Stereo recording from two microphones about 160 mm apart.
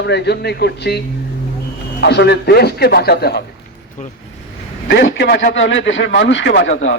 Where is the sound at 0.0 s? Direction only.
90° left.